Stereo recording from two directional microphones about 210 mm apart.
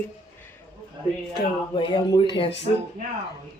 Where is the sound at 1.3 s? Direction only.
25° left (ahead or behind).